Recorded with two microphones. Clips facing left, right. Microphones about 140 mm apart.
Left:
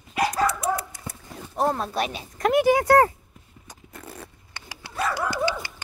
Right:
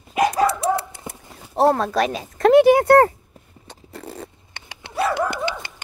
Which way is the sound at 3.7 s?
25° right (ahead or behind).